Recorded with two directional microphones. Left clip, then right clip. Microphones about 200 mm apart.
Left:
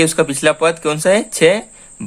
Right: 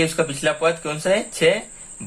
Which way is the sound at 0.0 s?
45° left (ahead or behind).